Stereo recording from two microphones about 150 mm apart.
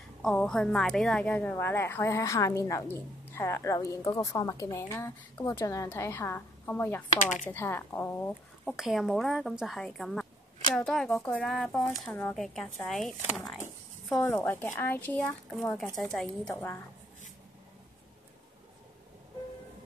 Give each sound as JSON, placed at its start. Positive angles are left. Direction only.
{"t": 0.2, "sound": "a woman's voice", "side_deg": 5}
{"t": 7.2, "sound": "speech", "side_deg": 55}
{"t": 7.4, "sound": "a woman's voice", "side_deg": 15}
{"t": 8.6, "sound": "a woman's voice", "side_deg": 0}
{"t": 14.1, "sound": "a woman's voice", "side_deg": 15}